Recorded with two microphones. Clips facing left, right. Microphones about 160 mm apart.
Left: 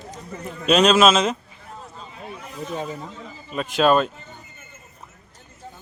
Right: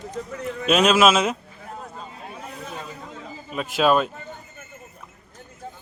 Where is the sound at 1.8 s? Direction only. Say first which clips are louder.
Even; 50° right (ahead or behind).